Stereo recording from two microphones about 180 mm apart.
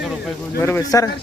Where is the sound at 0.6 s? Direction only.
15° left (ahead or behind).